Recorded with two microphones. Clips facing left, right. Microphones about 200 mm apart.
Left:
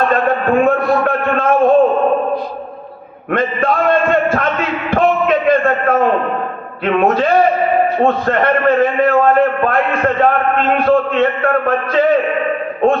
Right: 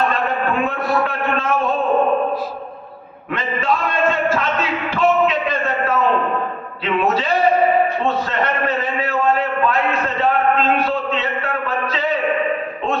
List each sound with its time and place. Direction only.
0.1 s a man's voice: 50° left (ahead or behind)
3.3 s a man's voice: 55° left (ahead or behind)
4.9 s a sound: 55° left (ahead or behind)
6.8 s a man's voice: 50° left (ahead or behind)